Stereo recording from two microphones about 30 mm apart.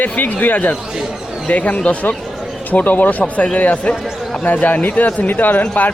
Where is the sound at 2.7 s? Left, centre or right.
Left.